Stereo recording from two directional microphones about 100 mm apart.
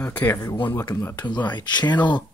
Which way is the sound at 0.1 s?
20° left (ahead or behind).